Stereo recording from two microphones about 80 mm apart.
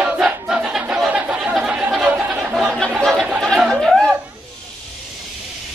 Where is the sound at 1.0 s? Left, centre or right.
Centre.